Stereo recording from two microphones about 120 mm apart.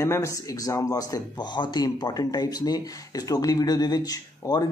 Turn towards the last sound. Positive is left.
turn(degrees=35)  # may be behind; listen again after turning